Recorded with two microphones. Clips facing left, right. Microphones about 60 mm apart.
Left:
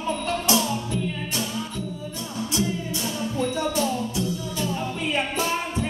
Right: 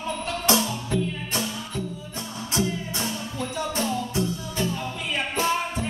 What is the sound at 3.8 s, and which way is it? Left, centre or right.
Music, right.